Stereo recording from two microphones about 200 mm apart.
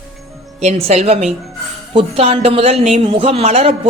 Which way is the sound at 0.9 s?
30° right (ahead or behind).